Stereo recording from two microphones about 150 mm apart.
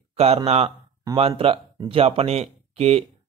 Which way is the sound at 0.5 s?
45° right (ahead or behind).